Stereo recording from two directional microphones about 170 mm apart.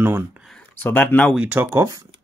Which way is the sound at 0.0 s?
10° right (ahead or behind).